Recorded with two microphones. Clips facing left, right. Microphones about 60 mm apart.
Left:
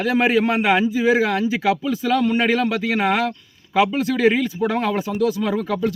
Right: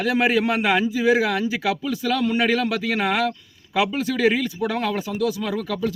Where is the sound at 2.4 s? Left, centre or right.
Centre.